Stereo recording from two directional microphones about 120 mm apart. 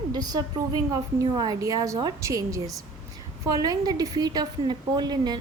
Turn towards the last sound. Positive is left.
turn(degrees=-35)  # may be behind; listen again after turning